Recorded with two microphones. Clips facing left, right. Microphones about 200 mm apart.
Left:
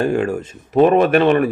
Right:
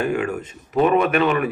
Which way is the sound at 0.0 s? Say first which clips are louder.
Left 4 dB; 30° left (ahead or behind).